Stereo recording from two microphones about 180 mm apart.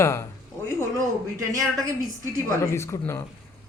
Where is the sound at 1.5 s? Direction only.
20° right (ahead or behind).